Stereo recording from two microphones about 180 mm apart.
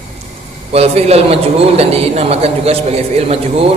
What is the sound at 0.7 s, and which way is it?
A man's voice, 35° right (ahead or behind).